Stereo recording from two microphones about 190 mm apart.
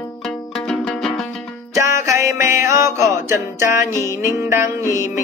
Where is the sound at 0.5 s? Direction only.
5° left (ahead or behind).